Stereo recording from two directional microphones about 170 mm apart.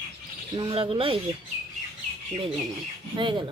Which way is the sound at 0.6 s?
30° right (ahead or behind).